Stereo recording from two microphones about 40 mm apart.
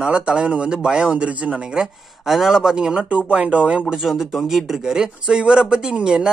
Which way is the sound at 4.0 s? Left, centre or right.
Centre.